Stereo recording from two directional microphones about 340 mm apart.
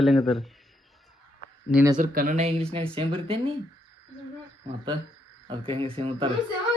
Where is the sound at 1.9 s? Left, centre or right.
Right.